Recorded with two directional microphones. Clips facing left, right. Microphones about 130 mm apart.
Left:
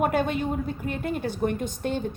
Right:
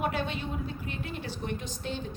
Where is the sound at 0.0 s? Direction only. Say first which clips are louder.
Left 7 dB; 50° left (ahead or behind).